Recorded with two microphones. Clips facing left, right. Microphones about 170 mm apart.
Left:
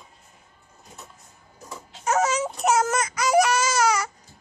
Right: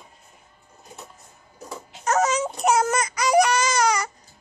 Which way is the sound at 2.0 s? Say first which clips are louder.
Right 1 dB; 10° left (ahead or behind).